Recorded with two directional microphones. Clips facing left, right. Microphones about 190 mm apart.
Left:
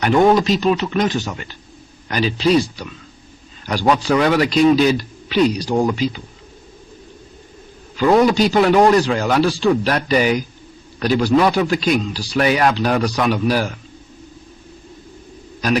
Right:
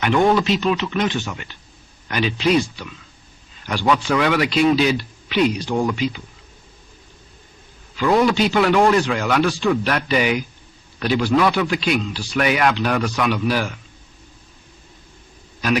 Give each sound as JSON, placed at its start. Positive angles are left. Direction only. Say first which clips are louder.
{"t": 0.0, "sound": "speech", "louder": "left 3 dB", "side_deg": 40}
{"t": 7.9, "sound": "speech", "louder": "left 3 dB", "side_deg": 40}